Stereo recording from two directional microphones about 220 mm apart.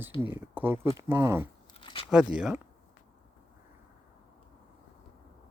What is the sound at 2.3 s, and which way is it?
Speech, 5° right (ahead or behind).